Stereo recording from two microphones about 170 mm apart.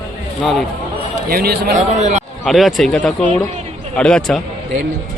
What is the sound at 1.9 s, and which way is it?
Speech, 45° right (ahead or behind).